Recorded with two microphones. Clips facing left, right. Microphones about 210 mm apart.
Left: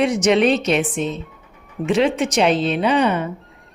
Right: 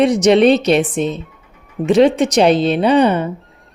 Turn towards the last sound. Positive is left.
turn(degrees=-35)  # may be behind; listen again after turning